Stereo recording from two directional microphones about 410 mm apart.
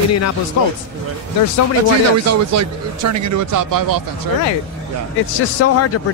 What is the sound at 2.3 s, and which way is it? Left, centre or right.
Speech, right.